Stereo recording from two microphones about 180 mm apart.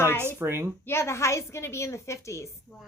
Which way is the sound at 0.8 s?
15° left (ahead or behind).